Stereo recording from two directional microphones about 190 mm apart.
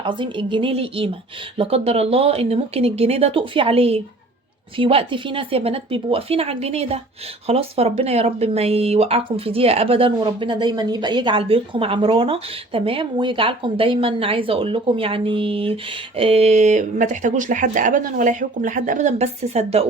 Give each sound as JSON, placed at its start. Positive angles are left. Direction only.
{"t": 0.0, "sound": "speech", "side_deg": -25}